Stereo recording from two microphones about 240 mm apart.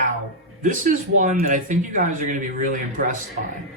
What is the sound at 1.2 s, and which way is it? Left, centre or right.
Speech, right.